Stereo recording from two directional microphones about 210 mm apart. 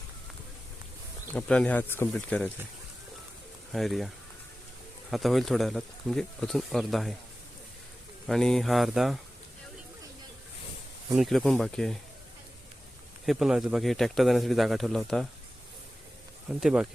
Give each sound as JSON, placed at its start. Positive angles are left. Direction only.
{"t": 1.3, "sound": "speech", "side_deg": 5}
{"t": 3.7, "sound": "speech", "side_deg": 0}
{"t": 5.1, "sound": "speech", "side_deg": 0}
{"t": 8.3, "sound": "speech", "side_deg": 0}
{"t": 11.1, "sound": "speech", "side_deg": 0}
{"t": 13.2, "sound": "speech", "side_deg": 0}
{"t": 16.6, "sound": "speech", "side_deg": -5}